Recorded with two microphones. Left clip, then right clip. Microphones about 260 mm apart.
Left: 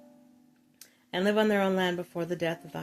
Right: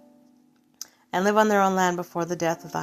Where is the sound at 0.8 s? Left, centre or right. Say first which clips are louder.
Right 6 dB; centre.